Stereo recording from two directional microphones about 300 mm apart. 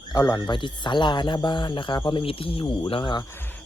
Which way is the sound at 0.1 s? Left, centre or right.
Centre.